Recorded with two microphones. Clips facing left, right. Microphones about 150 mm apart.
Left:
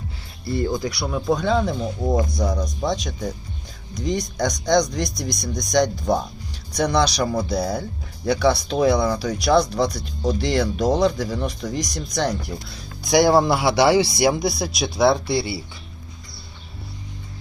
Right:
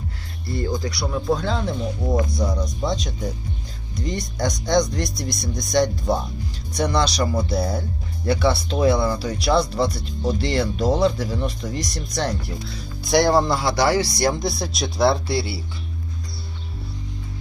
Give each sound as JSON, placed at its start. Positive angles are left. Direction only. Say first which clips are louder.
{"t": 0.4, "sound": "speech", "louder": "left 3 dB", "side_deg": 25}
{"t": 0.8, "sound": "speech", "louder": "left 1 dB", "side_deg": 0}
{"t": 2.9, "sound": "speech", "louder": "even", "side_deg": -5}